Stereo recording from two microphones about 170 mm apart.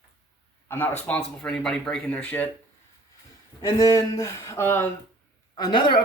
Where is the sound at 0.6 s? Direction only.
10° left (ahead or behind).